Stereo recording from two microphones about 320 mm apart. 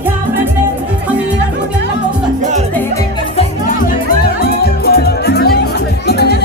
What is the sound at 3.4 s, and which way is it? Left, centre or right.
Music, left.